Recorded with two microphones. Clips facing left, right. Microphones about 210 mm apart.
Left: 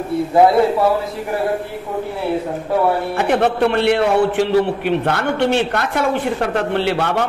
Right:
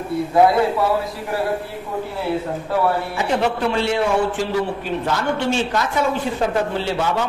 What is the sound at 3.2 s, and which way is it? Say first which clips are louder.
A man's voice: left 7 dB; 55° left (ahead or behind).